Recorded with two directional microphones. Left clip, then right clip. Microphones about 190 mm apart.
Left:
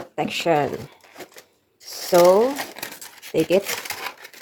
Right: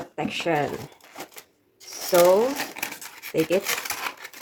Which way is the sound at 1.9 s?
40° left (ahead or behind).